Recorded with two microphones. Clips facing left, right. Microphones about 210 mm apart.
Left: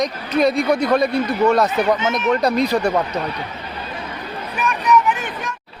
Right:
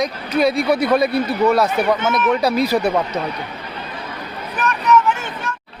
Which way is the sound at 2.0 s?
55° right (ahead or behind).